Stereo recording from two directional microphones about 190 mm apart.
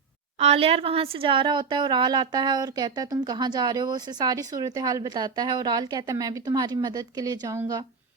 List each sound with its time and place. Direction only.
0.3 s speech: 30° right (ahead or behind)